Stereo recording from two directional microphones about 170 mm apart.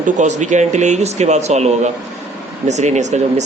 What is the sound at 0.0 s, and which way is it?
A man's voice, 45° right (ahead or behind).